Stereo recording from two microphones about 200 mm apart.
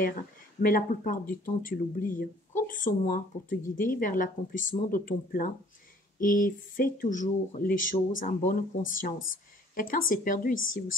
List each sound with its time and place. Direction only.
0.6 s speech: 45° left (ahead or behind)